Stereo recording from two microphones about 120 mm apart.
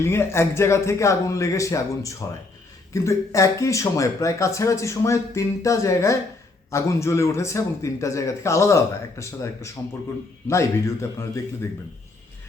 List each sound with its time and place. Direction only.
0.0 s speech: 20° left (ahead or behind)